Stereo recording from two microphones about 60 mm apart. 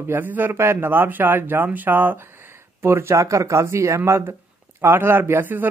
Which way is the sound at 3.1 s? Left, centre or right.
Right.